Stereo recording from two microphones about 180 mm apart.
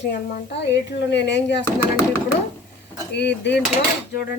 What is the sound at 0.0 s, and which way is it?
Speech, 65° left (ahead or behind).